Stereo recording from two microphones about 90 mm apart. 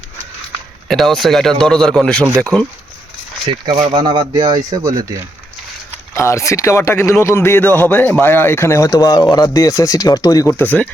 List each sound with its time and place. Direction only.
0.9 s speech: 5° left (ahead or behind)
3.5 s speech: 90° right
3.9 s a man's voice: 65° right (ahead or behind); by 5.1 s 45° right (ahead or behind)
6.1 s speech: 30° left (ahead or behind)
10.5 s speech: 15° left (ahead or behind)